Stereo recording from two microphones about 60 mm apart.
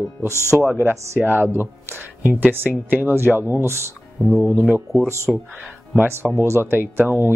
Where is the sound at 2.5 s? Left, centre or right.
Right.